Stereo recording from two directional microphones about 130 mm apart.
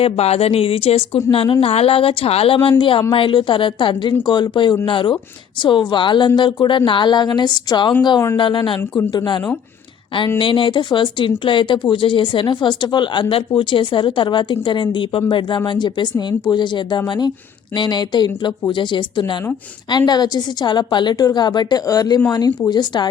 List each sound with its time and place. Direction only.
0.0 s a woman's voice: 50° left (ahead or behind); by 23.0 s 35° left (ahead or behind)